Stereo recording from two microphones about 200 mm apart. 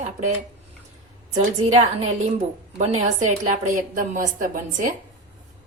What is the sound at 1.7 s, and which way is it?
A woman's voice, 30° right (ahead or behind).